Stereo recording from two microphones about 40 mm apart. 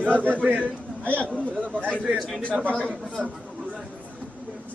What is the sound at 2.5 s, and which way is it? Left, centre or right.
Speech, right.